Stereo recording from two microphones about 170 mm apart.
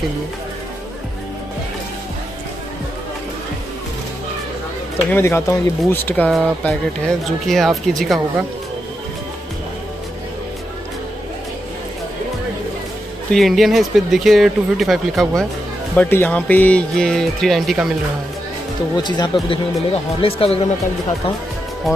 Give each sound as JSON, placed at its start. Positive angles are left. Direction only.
{"t": 5.1, "sound": "speech", "side_deg": 15}
{"t": 13.3, "sound": "speech", "side_deg": 0}
{"t": 19.0, "sound": "speech", "side_deg": 25}
{"t": 21.8, "sound": "speech", "side_deg": 0}